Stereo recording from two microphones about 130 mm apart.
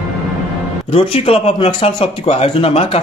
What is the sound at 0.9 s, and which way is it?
Speech, 45° left (ahead or behind).